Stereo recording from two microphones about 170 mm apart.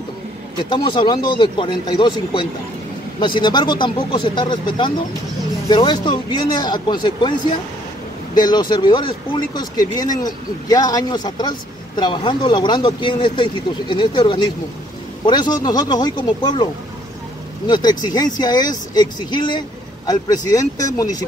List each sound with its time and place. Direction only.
0.7 s speech: 30° left (ahead or behind)
8.4 s speech: 25° left (ahead or behind)
17.6 s speech: 25° left (ahead or behind)